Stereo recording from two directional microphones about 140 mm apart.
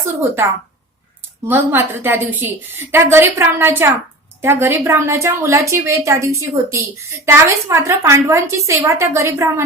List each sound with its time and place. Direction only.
1.5 s a woman's voice: 15° right (ahead or behind)